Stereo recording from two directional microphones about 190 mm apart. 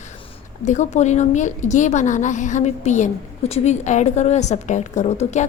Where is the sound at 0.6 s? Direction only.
40° left (ahead or behind).